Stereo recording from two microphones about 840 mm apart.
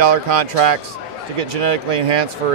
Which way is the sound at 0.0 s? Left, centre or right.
Right.